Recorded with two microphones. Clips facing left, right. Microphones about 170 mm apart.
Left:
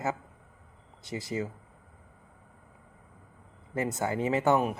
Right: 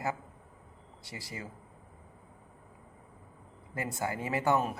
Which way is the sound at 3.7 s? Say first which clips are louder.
Left 5 dB; 20° left (ahead or behind).